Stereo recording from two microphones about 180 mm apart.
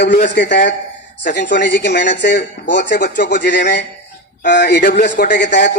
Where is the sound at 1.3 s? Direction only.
75° left (ahead or behind).